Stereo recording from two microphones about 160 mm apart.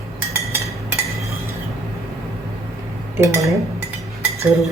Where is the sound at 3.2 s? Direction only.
20° right (ahead or behind).